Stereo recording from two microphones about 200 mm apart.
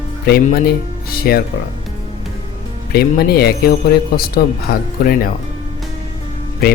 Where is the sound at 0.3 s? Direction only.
50° left (ahead or behind).